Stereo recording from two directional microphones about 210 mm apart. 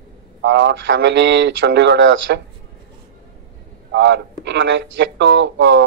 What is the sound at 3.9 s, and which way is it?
Speech, 55° right (ahead or behind).